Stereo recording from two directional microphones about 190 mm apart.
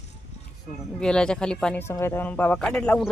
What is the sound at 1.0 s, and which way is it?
Speech, 5° left (ahead or behind).